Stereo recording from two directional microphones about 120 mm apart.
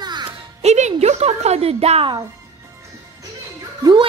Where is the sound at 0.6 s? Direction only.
70° right (ahead or behind).